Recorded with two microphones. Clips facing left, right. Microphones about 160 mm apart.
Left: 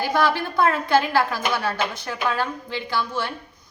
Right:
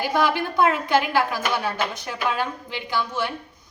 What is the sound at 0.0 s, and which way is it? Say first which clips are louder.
A woman's voice: even; 15° right (ahead or behind).